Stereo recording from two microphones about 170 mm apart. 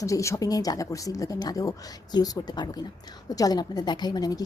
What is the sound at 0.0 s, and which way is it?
Speech, 20° left (ahead or behind).